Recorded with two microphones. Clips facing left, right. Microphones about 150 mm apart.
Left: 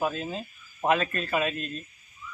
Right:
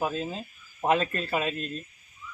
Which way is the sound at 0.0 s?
30° right (ahead or behind).